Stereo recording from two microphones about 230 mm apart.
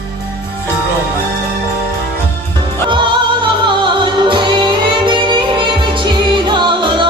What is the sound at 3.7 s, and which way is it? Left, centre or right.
Music, right.